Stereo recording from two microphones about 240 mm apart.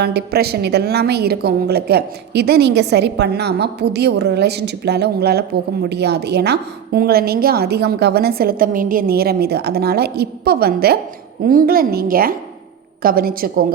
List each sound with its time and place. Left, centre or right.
0.0 s a woman's voice: right